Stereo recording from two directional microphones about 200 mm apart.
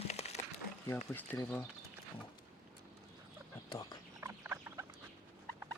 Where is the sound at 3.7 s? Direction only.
20° left (ahead or behind).